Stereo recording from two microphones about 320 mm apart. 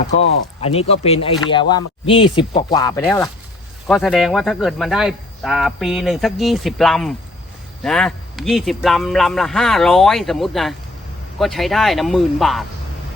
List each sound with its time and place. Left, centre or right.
0.6 s speech: centre